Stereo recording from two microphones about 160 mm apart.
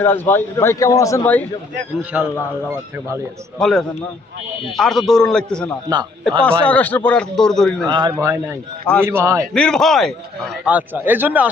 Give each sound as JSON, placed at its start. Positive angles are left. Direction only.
{"t": 0.0, "sound": "a man's voice", "side_deg": 15}
{"t": 2.1, "sound": "a man's voice", "side_deg": -10}
{"t": 3.6, "sound": "a man's voice", "side_deg": 5}
{"t": 7.9, "sound": "speech", "side_deg": -30}
{"t": 8.1, "sound": "a man's voice", "side_deg": -15}
{"t": 9.5, "sound": "a man's voice", "side_deg": 5}